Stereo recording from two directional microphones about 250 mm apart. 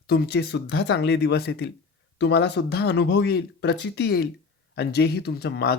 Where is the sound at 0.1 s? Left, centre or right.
Left.